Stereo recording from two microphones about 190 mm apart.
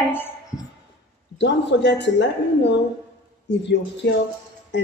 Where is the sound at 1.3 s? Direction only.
65° left (ahead or behind).